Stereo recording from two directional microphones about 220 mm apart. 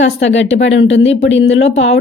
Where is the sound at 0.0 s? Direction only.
55° left (ahead or behind).